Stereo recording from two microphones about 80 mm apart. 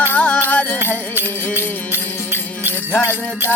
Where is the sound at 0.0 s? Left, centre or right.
Centre.